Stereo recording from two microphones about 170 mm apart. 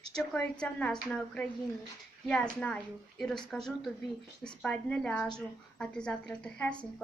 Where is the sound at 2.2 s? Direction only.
5° left (ahead or behind).